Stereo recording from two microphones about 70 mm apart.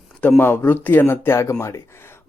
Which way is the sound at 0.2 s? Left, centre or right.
Left.